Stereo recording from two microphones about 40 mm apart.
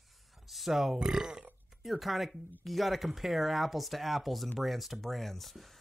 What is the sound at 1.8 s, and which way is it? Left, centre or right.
Speech, centre.